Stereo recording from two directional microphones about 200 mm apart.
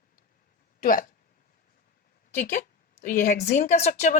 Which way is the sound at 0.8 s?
45° left (ahead or behind).